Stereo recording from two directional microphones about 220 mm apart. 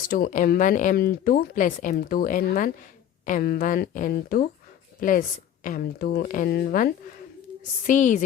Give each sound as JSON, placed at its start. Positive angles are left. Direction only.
{"t": 0.1, "sound": "a woman's voice", "side_deg": 35}